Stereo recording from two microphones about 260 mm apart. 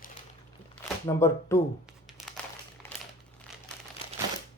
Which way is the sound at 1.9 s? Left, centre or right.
Centre.